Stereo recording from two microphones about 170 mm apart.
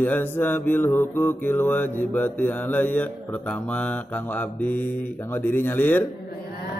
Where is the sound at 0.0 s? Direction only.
10° left (ahead or behind).